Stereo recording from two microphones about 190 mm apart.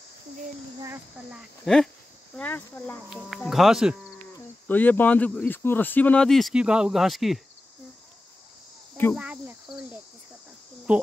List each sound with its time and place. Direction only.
0.7 s speech: 15° right (ahead or behind)
1.3 s speech: 5° left (ahead or behind)
4.6 s speech: 10° left (ahead or behind)
9.1 s speech: 5° right (ahead or behind)